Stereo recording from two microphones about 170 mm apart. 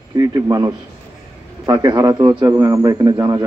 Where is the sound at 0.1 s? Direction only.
20° right (ahead or behind).